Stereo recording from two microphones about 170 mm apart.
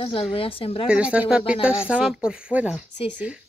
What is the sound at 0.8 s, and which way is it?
Speech, 5° right (ahead or behind).